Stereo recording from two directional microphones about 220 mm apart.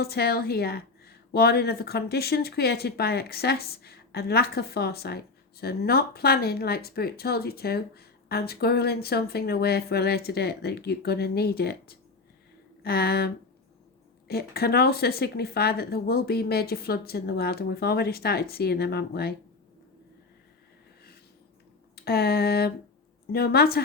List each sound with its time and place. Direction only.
0.0 s speech: 45° left (ahead or behind)
21.9 s a sound: 45° left (ahead or behind)
23.3 s speech: 45° left (ahead or behind)